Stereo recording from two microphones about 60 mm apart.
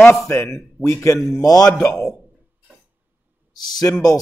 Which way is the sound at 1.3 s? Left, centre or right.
Left.